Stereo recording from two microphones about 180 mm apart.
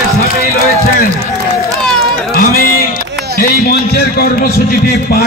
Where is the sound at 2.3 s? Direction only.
60° left (ahead or behind).